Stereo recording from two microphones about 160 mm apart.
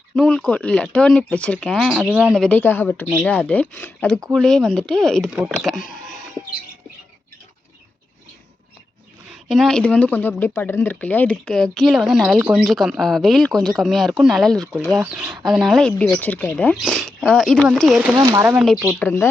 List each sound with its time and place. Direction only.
0.2 s speech: 5° left (ahead or behind)
2.3 s speech: 5° left (ahead or behind)
9.3 s speech: centre (ahead or behind)
18.0 s speech: 10° right (ahead or behind)
18.5 s speech: centre (ahead or behind)
19.0 s speech: 15° left (ahead or behind)